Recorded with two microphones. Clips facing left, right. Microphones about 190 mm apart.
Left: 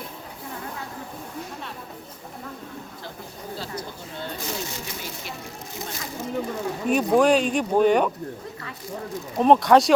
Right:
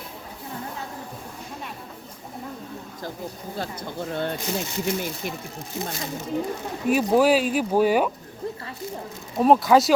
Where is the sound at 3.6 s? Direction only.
55° right (ahead or behind).